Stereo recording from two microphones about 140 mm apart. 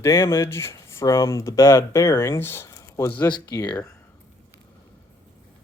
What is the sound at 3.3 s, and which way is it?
Speech, 30° left (ahead or behind).